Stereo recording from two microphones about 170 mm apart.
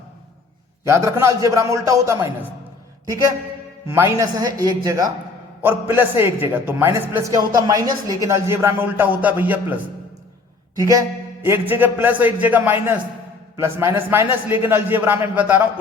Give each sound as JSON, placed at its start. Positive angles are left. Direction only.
{"t": 0.9, "sound": "a man's voice", "side_deg": -15}
{"t": 3.8, "sound": "a man's voice", "side_deg": -15}
{"t": 10.8, "sound": "a man's voice", "side_deg": -20}